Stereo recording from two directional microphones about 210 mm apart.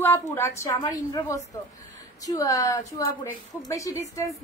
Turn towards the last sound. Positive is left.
turn(degrees=15)  # may be behind; listen again after turning